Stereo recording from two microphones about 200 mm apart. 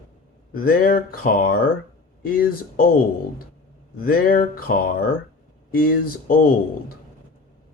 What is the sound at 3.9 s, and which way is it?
Speech, 45° left (ahead or behind).